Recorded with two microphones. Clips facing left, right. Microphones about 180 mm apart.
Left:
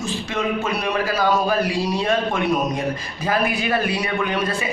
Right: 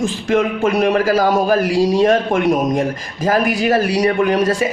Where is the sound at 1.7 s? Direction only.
90° right.